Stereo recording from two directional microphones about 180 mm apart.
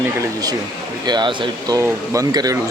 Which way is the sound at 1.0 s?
25° right (ahead or behind).